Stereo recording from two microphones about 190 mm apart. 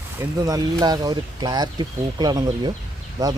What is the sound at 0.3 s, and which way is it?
Speech, 20° right (ahead or behind).